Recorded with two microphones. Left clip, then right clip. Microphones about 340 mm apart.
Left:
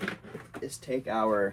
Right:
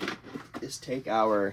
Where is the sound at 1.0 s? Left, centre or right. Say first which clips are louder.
Right 2 dB; right.